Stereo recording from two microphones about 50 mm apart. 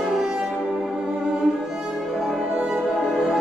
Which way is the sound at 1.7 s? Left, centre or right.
Centre.